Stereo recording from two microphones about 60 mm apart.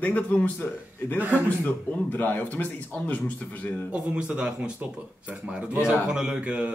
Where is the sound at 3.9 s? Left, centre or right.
Centre.